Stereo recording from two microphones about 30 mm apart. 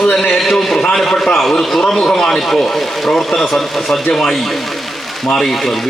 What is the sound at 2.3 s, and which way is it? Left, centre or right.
Speech, centre.